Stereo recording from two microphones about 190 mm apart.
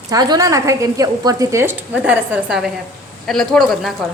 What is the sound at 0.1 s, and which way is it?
A woman's voice, 20° right (ahead or behind).